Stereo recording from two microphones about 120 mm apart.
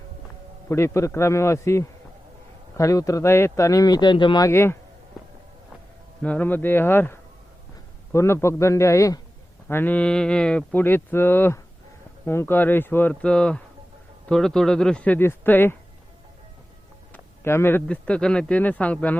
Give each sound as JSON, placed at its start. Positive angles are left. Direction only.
{"t": 0.7, "sound": "speech", "side_deg": 25}
{"t": 4.4, "sound": "speech", "side_deg": 20}
{"t": 6.2, "sound": "speech", "side_deg": 15}
{"t": 17.1, "sound": "speech", "side_deg": 20}